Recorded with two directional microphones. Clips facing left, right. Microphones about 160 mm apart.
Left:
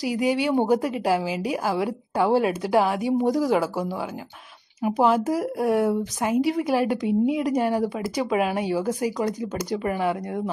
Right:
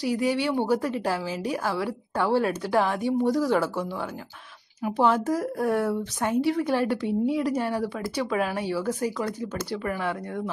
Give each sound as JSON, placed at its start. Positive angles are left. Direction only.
{"t": 0.0, "sound": "speech", "side_deg": 15}
{"t": 4.8, "sound": "speech", "side_deg": 10}